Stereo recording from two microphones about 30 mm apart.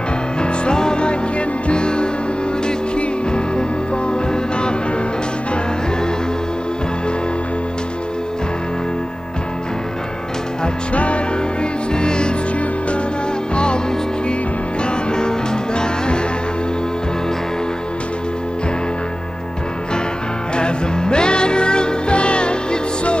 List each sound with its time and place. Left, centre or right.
0.4 s music: left
3.3 s music: left
10.9 s music: left
12.0 s music: left
14.8 s music: left
20.5 s music: left